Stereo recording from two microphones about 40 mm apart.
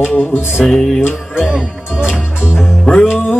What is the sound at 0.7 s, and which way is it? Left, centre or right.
Music, centre.